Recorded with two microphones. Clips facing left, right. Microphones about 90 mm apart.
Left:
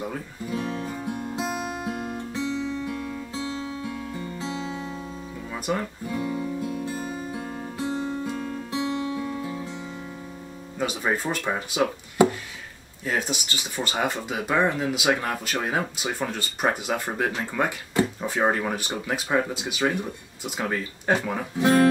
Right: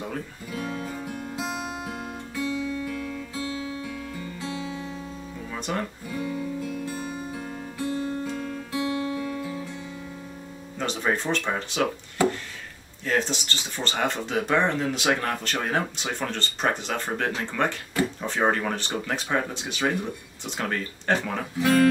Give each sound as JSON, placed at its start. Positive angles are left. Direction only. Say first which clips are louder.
{"t": 0.6, "sound": "music", "louder": "left 1 dB", "side_deg": 25}
{"t": 2.3, "sound": "guitar", "louder": "right 1 dB", "side_deg": 25}
{"t": 3.9, "sound": "music", "louder": "left 2 dB", "side_deg": 25}
{"t": 5.7, "sound": "speech", "louder": "left 2 dB", "side_deg": 15}
{"t": 6.1, "sound": "music", "louder": "left 1 dB", "side_deg": 25}
{"t": 10.8, "sound": "speech", "louder": "even", "side_deg": 5}
{"t": 21.5, "sound": "speech", "louder": "left 1 dB", "side_deg": 20}